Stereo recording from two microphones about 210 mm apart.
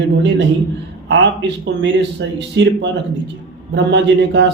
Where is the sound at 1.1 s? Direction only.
60° right (ahead or behind).